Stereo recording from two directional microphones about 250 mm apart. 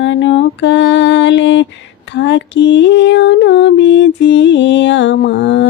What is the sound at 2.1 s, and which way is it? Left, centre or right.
Music, left.